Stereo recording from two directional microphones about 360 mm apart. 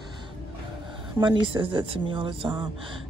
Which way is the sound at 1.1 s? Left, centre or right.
Centre.